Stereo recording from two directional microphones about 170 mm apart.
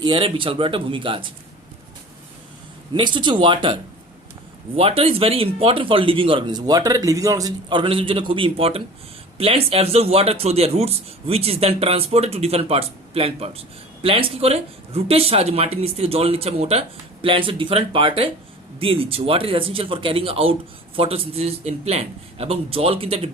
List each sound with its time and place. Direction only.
0.0 s speech: 30° right (ahead or behind)
2.9 s speech: 25° right (ahead or behind)